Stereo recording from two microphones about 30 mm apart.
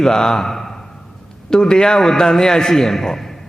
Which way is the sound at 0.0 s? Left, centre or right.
Left.